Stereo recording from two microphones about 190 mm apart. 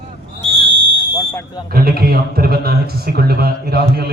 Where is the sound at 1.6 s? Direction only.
50° right (ahead or behind).